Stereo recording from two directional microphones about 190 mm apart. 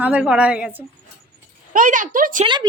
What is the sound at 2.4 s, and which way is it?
Speech, 25° right (ahead or behind).